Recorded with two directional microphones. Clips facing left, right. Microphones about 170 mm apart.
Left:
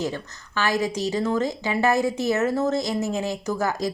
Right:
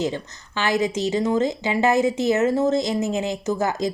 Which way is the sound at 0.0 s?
20° right (ahead or behind).